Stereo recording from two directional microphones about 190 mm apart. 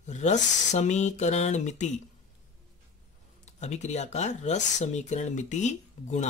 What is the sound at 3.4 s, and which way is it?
Speech, 35° left (ahead or behind).